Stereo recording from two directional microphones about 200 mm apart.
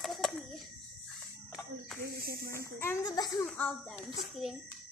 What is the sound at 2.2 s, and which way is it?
Speech, 50° right (ahead or behind).